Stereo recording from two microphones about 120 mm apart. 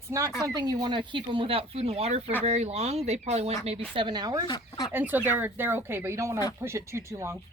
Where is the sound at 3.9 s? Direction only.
40° right (ahead or behind).